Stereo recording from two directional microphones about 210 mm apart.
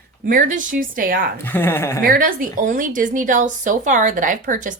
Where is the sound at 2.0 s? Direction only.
40° right (ahead or behind).